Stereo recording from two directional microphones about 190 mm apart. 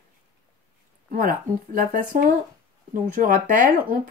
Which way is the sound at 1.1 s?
50° right (ahead or behind).